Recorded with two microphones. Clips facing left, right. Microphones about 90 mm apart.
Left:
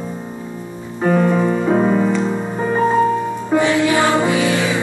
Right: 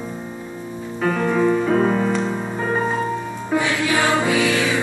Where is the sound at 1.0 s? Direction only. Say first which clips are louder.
Left 3 dB; 25° left (ahead or behind).